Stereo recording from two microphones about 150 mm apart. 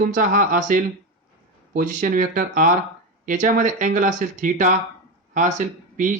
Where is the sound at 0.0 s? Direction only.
65° right (ahead or behind).